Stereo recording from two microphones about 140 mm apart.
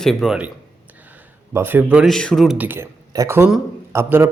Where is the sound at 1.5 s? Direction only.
15° right (ahead or behind).